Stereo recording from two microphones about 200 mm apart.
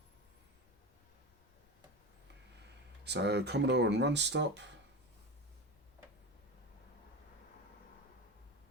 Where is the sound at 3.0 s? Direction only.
55° right (ahead or behind).